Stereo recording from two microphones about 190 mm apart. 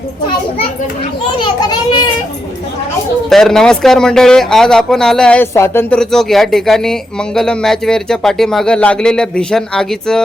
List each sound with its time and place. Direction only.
1.4 s a child's voice: 25° left (ahead or behind)
3.2 s speech: centre (ahead or behind)